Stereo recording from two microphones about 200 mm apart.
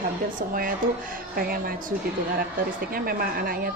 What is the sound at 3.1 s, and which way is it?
Speech, 45° right (ahead or behind).